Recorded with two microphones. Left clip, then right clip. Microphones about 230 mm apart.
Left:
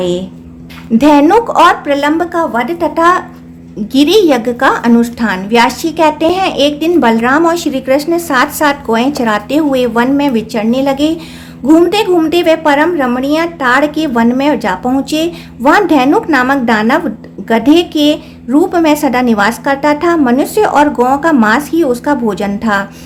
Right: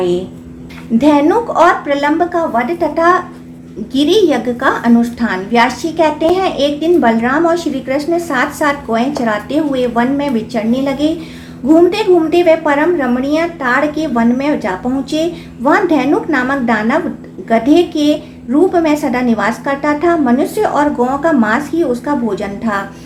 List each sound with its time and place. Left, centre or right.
0.9 s a woman's voice: left